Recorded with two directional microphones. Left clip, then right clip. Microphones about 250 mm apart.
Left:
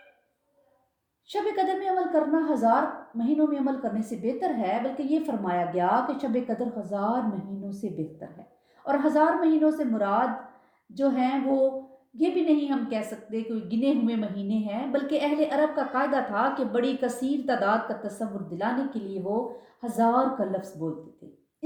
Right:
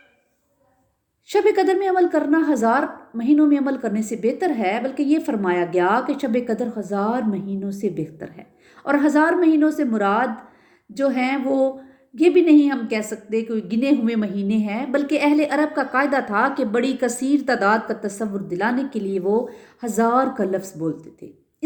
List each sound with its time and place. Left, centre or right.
1.3 s a woman's voice: right